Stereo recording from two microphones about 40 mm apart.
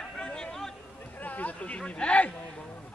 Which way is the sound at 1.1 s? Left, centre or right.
Left.